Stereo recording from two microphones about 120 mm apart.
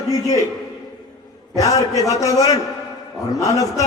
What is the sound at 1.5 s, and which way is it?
A man's voice, 30° left (ahead or behind).